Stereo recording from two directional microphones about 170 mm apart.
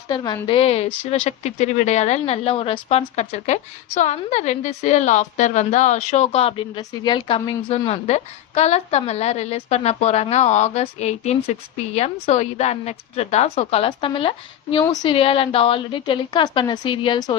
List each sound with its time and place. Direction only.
0.1 s a woman's voice: 25° left (ahead or behind)